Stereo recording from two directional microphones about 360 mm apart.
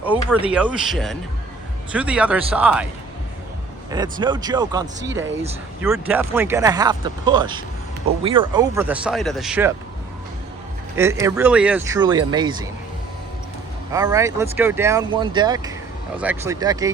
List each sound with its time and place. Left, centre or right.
0.0 s speech: centre
3.9 s speech: centre
10.9 s speech: centre
13.9 s speech: centre